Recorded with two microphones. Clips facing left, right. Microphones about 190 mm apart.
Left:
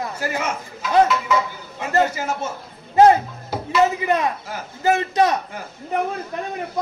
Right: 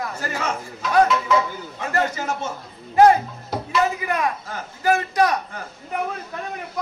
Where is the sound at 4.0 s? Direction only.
25° left (ahead or behind).